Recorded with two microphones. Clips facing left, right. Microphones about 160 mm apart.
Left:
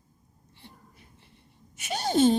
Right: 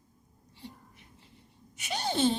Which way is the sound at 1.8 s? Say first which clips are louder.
Left 6 dB; 40° left (ahead or behind).